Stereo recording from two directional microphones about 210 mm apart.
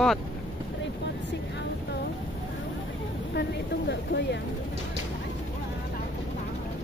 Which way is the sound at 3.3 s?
50° left (ahead or behind).